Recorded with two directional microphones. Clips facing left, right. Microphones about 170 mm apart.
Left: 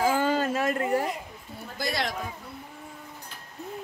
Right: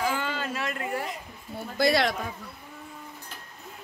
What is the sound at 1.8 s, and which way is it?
Speech, 75° right (ahead or behind).